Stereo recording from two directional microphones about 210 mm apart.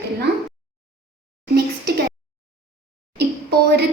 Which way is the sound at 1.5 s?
50° right (ahead or behind).